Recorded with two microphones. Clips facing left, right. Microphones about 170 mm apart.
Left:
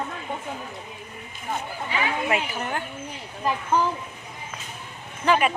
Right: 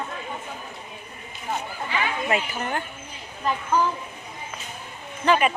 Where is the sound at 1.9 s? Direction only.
5° left (ahead or behind).